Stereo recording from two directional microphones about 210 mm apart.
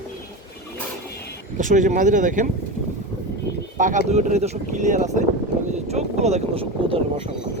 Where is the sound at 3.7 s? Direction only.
35° right (ahead or behind).